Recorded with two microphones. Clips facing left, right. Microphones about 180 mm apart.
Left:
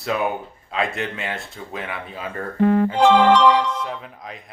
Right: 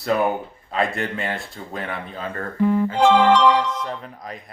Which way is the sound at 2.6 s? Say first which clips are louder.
Left 2 dB; 70° left (ahead or behind).